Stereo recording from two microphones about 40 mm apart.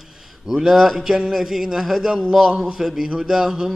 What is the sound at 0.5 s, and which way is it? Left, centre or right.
A man's voice, centre.